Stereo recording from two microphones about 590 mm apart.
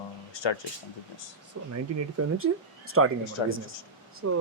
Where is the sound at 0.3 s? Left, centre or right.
Left.